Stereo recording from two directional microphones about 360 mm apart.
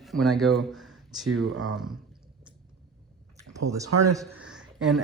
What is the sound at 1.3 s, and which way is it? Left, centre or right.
Speech, right.